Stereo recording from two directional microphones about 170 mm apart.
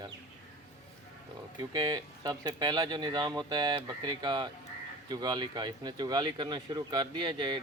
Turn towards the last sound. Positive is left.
turn(degrees=-25)  # may be behind; listen again after turning